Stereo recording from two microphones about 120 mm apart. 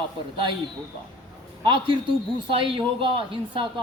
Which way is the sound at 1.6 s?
45° right (ahead or behind).